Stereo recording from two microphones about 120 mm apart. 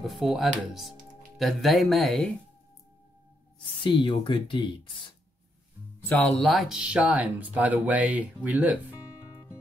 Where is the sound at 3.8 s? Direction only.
45° left (ahead or behind).